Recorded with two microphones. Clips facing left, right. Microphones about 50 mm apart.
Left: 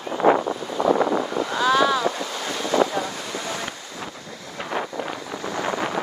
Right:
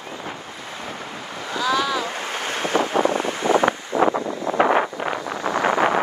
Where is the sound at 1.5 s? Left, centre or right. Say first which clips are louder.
Left 2 dB; left.